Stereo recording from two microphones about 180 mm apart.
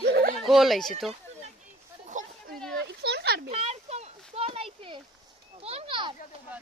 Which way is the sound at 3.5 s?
35° right (ahead or behind).